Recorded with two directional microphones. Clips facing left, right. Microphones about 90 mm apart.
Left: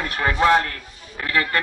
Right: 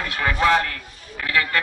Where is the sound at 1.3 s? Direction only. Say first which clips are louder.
Even; 35° left (ahead or behind).